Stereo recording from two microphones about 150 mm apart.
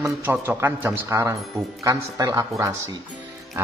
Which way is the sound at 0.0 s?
15° right (ahead or behind).